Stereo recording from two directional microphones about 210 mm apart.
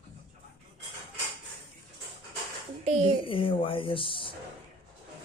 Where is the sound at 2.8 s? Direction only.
30° right (ahead or behind).